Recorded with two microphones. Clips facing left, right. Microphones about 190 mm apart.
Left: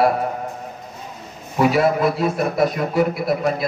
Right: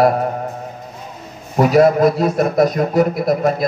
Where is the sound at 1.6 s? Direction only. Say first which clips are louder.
Right 5 dB; 40° right (ahead or behind).